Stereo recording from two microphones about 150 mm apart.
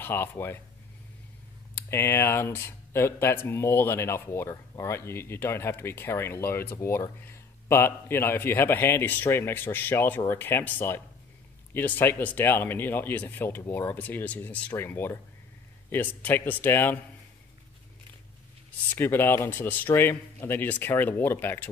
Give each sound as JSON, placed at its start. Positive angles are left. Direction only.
{"t": 0.0, "sound": "speech", "side_deg": 15}
{"t": 1.8, "sound": "speech", "side_deg": 15}
{"t": 18.9, "sound": "speech", "side_deg": 15}